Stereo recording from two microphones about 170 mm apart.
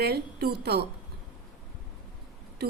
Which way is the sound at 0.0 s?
70° right (ahead or behind).